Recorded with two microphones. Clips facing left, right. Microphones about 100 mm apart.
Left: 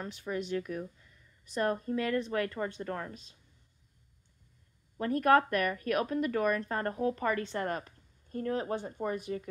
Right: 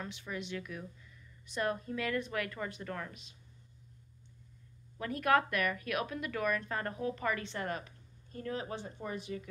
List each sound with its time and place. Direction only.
0.0 s speech: 40° left (ahead or behind)
4.9 s speech: 40° left (ahead or behind)